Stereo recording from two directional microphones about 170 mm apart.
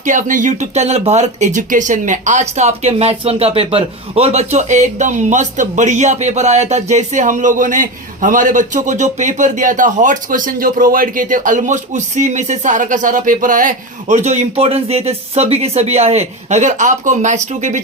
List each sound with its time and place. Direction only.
0.0 s speech: 50° right (ahead or behind)